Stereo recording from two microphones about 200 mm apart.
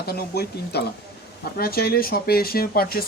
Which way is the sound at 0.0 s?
50° left (ahead or behind).